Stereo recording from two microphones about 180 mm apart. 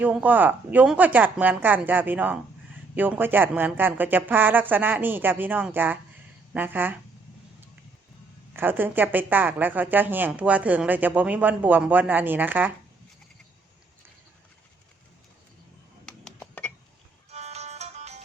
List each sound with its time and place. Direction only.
0.0 s speech: 10° right (ahead or behind)
8.5 s speech: 10° right (ahead or behind)
16.0 s a sound: 5° left (ahead or behind)
17.3 s music: 35° right (ahead or behind)